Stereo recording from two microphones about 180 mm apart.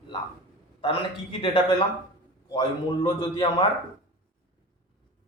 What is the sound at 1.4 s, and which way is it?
Speech, 30° left (ahead or behind).